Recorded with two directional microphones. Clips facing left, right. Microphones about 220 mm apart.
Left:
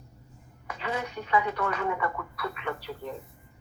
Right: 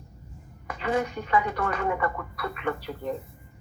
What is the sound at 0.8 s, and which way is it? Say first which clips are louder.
Speech: right 6 dB; 50° right (ahead or behind).